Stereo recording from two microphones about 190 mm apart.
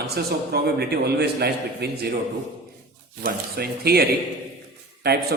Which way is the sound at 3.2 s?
55° right (ahead or behind).